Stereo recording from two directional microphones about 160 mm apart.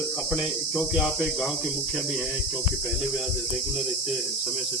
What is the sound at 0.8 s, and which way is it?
Speech, centre (ahead or behind).